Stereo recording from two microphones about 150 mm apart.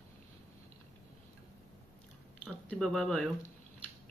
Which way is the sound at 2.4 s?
5° left (ahead or behind).